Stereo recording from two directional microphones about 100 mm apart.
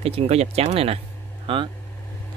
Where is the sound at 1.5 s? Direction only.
65° right (ahead or behind).